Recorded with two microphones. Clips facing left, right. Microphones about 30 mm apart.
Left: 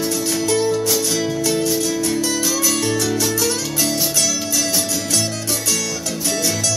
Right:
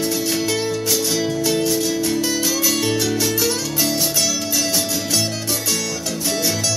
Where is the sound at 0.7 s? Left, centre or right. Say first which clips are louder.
Left 2 dB; centre.